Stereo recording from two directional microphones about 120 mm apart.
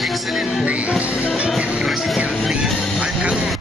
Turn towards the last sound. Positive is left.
turn(degrees=-5)  # may be behind; listen again after turning